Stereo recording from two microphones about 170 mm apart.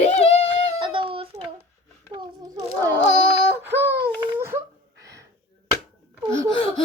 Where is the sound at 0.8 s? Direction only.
30° right (ahead or behind).